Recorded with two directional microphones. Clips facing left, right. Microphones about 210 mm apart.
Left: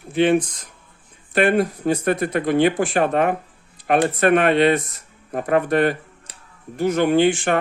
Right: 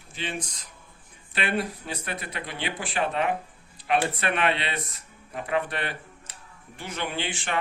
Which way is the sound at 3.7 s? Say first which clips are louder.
Left 6 dB; 50° left (ahead or behind).